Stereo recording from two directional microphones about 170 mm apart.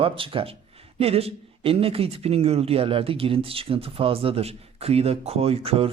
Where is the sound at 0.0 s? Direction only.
30° right (ahead or behind).